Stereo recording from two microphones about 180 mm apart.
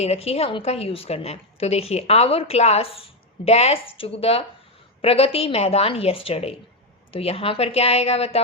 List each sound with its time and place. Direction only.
0.0 s a woman's voice: 35° left (ahead or behind)